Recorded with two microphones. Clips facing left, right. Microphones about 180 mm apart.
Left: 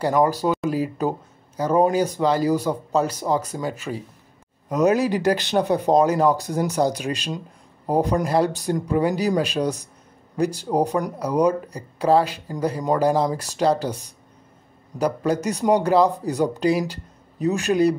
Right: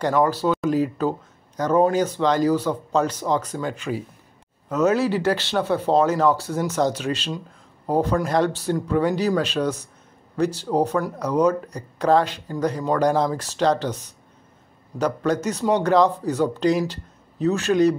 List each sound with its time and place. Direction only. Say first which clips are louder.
0.0 s speech: left 1 dB; 15° left (ahead or behind)